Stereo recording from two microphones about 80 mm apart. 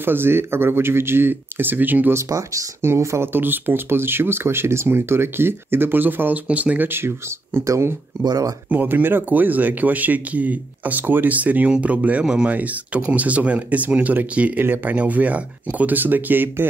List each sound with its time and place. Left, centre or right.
0.0 s speech: right
2.1 s speech: right
7.6 s speech: right
8.2 s speech: right
8.6 s speech: right